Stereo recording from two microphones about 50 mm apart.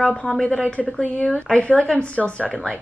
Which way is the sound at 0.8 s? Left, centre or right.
Left.